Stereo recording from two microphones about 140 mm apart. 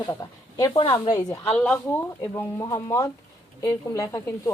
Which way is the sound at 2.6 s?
20° left (ahead or behind).